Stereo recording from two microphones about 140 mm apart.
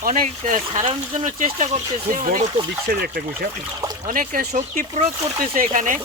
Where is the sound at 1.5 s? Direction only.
50° right (ahead or behind); by 2.5 s 70° right (ahead or behind).